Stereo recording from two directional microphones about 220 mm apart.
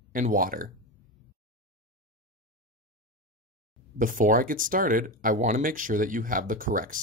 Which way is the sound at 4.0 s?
40° right (ahead or behind).